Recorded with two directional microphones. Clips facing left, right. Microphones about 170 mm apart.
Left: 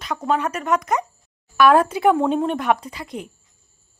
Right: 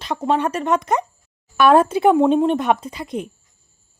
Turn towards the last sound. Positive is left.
turn(degrees=-20)  # may be behind; listen again after turning